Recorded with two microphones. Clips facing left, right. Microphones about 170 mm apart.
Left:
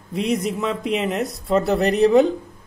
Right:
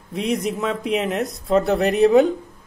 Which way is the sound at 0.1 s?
Centre (ahead or behind).